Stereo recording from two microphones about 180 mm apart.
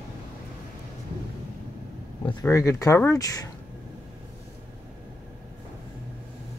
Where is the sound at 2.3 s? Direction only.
20° left (ahead or behind).